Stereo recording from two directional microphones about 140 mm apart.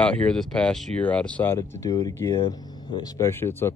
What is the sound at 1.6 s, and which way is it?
Speech, 25° left (ahead or behind).